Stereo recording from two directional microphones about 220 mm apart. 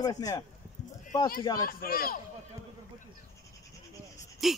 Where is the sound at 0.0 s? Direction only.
15° left (ahead or behind).